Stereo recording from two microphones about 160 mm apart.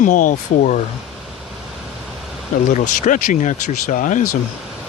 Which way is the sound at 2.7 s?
50° left (ahead or behind).